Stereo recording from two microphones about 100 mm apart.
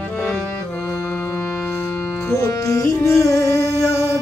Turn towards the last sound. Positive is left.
turn(degrees=30)  # may be behind; listen again after turning